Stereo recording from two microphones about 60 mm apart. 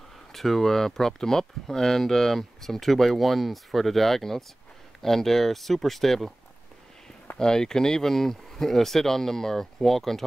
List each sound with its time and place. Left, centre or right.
0.3 s speech: centre
7.3 s speech: centre